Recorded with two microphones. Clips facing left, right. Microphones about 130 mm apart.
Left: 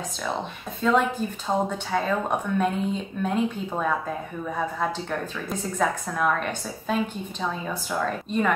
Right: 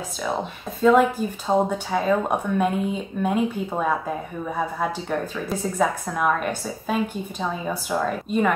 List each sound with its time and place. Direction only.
0.8 s speech: 5° right (ahead or behind)
1.5 s speech: 20° right (ahead or behind)
5.5 s speech: 5° right (ahead or behind)